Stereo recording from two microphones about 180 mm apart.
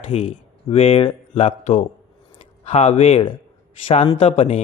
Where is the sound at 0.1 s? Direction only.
35° left (ahead or behind).